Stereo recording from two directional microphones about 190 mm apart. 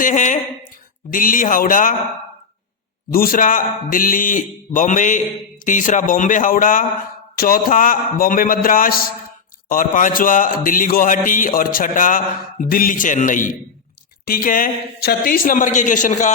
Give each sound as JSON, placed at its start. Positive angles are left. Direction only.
{"t": 0.0, "sound": "speech", "side_deg": 40}
{"t": 1.1, "sound": "music", "side_deg": 45}
{"t": 3.1, "sound": "music", "side_deg": 50}